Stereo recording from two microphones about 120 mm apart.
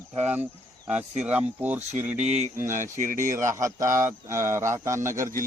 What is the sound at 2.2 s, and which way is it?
Speech, 65° right (ahead or behind).